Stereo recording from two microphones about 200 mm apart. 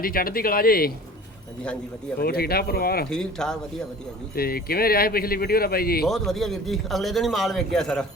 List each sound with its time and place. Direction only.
0.0 s speech: 45° left (ahead or behind)
2.2 s speech: 50° left (ahead or behind)
3.1 s a man's voice: 5° left (ahead or behind)
4.4 s speech: 50° left (ahead or behind)
6.1 s a man's voice: centre (ahead or behind)